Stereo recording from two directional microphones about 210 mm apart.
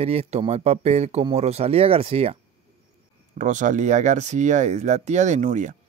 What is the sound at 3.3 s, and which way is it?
Speech, 35° right (ahead or behind).